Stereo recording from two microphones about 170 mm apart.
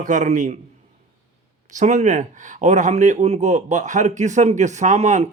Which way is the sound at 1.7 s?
45° right (ahead or behind).